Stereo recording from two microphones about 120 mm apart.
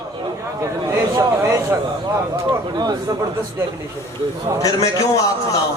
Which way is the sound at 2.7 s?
35° right (ahead or behind).